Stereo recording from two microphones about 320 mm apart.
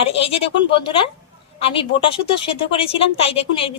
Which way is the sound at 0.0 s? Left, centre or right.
Centre.